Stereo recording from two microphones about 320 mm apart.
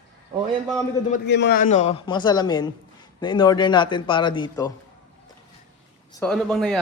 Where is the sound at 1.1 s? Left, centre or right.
Left; by 4.7 s centre.